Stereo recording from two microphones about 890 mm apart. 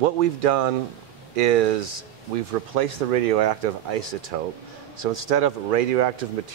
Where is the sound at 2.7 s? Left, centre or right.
Right.